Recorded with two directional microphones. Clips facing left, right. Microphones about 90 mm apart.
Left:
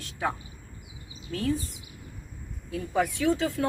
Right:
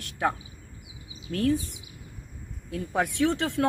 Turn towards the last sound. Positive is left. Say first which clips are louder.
# right 1 dB
turn(degrees=-75)  # may be behind; listen again after turning